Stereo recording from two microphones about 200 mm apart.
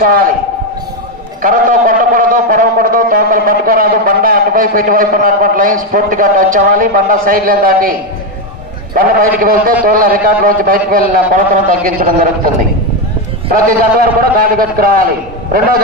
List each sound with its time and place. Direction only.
0.0 s speech: 45° right (ahead or behind)
1.4 s speech: 45° right (ahead or behind)
9.4 s speech: 45° right (ahead or behind)
13.5 s speech: 45° right (ahead or behind)